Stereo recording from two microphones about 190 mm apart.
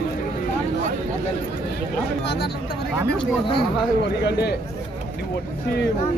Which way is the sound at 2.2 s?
60° left (ahead or behind).